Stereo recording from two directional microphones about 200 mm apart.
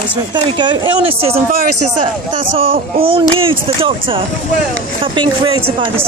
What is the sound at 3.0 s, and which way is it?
Speech, 25° right (ahead or behind).